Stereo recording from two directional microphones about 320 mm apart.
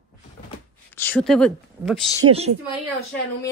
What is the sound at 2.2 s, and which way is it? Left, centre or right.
Speech, centre.